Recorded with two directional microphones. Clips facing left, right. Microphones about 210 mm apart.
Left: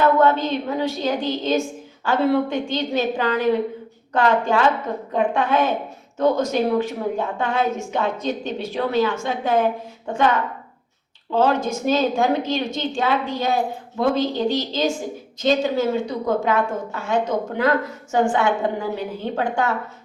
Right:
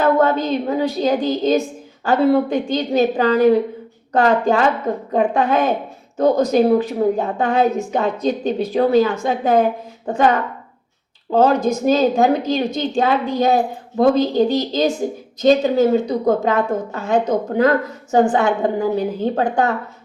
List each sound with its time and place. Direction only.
0.0 s a woman's voice: 40° right (ahead or behind)